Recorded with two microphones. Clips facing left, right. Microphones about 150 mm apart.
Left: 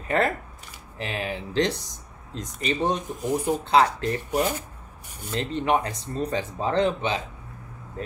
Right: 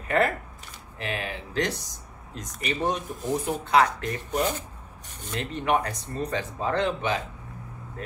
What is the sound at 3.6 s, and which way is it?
Speech, 30° left (ahead or behind).